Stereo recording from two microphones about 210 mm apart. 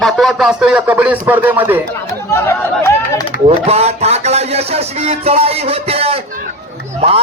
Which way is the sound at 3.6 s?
30° right (ahead or behind).